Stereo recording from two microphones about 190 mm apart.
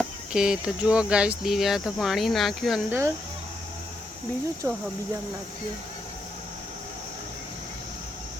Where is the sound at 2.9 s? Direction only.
10° right (ahead or behind).